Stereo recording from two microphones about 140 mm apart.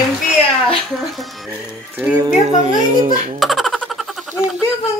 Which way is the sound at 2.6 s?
55° right (ahead or behind).